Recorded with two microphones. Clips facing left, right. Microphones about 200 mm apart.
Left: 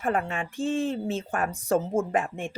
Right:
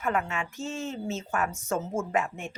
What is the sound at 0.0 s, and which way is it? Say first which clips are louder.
A woman's voice: left 2 dB; 30° left (ahead or behind).